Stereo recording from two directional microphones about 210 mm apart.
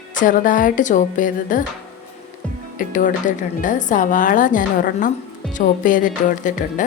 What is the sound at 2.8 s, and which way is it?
A woman's voice, 40° left (ahead or behind).